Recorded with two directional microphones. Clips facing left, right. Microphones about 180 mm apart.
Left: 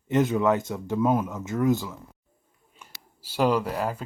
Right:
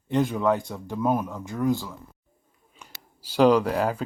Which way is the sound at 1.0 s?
15° right (ahead or behind).